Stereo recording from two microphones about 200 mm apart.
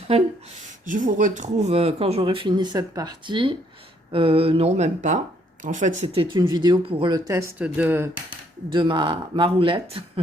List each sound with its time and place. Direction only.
0.9 s speech: 40° right (ahead or behind); by 8.1 s 10° right (ahead or behind)
8.7 s speech: 25° right (ahead or behind)